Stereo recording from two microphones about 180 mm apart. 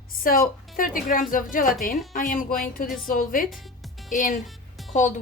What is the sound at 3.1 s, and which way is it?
A woman's voice, 50° left (ahead or behind).